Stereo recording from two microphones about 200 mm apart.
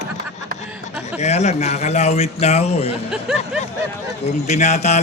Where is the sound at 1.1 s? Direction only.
35° left (ahead or behind).